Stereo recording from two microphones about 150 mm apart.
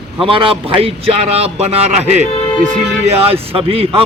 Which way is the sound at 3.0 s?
40° right (ahead or behind).